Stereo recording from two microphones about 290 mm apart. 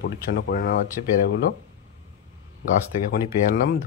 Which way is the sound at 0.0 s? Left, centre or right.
Left.